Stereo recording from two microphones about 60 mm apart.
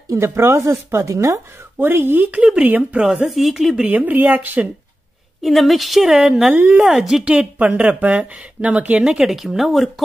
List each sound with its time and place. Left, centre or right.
0.2 s speech: right
1.8 s speech: right
2.5 s speech: right
3.3 s a woman's voice: centre
3.7 s speech: right
5.4 s a woman's voice: centre
6.5 s speech: right
6.8 s speech: centre
7.2 s speech: centre
9.0 s a woman's voice: centre